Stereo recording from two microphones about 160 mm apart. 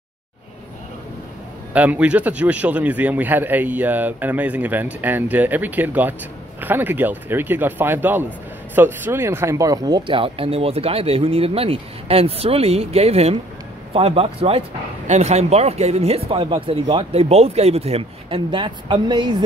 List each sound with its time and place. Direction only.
1.7 s a man's voice: 10° right (ahead or behind); by 19.3 s 30° right (ahead or behind)